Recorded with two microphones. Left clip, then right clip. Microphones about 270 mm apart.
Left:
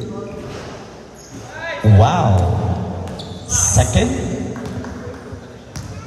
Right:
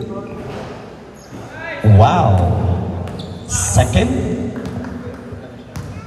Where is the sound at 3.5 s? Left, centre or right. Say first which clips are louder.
Even; right.